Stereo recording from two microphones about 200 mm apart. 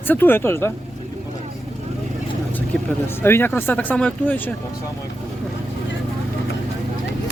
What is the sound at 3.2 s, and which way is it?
Speech, 10° left (ahead or behind).